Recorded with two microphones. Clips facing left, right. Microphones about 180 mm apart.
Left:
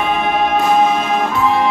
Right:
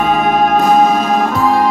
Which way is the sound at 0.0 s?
40° right (ahead or behind).